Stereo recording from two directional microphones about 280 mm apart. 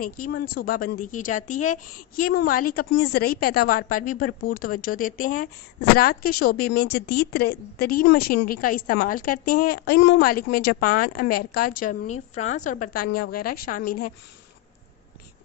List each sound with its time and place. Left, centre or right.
0.2 s a woman's voice: left